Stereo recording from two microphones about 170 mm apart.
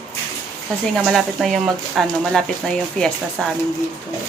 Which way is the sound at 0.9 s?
Centre (ahead or behind).